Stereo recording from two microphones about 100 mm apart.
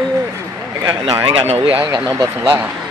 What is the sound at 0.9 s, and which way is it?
Speech, 60° right (ahead or behind).